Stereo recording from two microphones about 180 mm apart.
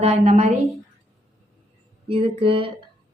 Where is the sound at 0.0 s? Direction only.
35° right (ahead or behind).